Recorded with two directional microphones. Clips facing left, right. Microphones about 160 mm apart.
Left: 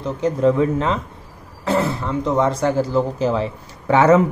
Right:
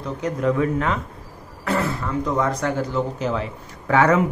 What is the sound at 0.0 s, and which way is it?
Speech, 30° left (ahead or behind).